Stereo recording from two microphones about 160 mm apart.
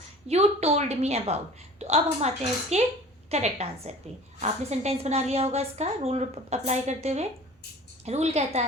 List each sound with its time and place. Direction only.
0.3 s a woman's voice: 40° right (ahead or behind)